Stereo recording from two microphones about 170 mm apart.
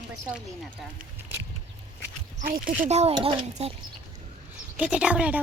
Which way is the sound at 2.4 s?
55° right (ahead or behind).